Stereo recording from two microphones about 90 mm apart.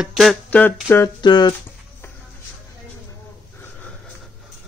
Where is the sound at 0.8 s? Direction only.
30° left (ahead or behind).